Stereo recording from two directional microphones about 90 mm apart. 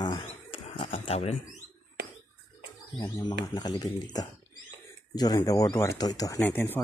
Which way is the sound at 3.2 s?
50° left (ahead or behind).